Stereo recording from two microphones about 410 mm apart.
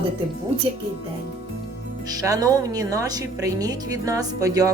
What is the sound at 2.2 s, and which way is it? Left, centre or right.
Speech, centre.